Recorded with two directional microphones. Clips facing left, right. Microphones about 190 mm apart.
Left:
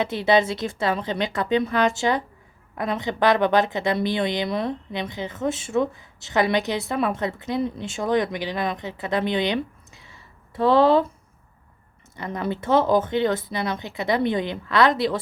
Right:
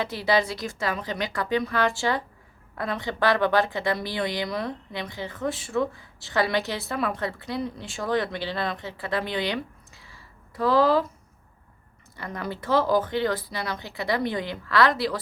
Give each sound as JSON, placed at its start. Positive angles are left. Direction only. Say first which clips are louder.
{"t": 0.0, "sound": "a woman's voice", "louder": "left 4 dB", "side_deg": 25}
{"t": 12.1, "sound": "a woman's voice", "louder": "left 5 dB", "side_deg": 20}